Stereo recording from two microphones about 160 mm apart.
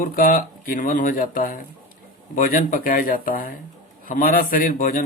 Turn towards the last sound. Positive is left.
turn(degrees=55)  # may be behind; listen again after turning